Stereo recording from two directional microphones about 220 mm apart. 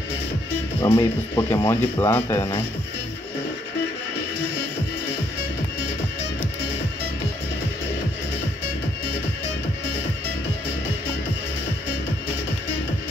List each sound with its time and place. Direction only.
0.8 s speech: 15° left (ahead or behind)